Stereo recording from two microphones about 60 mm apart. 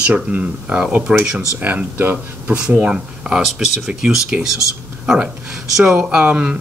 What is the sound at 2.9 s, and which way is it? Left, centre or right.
Speech, centre.